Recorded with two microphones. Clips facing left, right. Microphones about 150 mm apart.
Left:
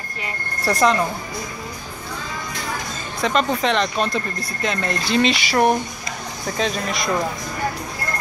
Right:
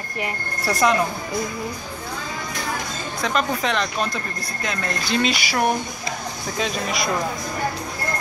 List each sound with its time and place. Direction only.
0.7 s speech: 5° right (ahead or behind)
3.2 s speech: centre (ahead or behind)